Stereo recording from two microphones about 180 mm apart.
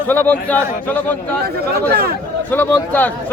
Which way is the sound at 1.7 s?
60° right (ahead or behind).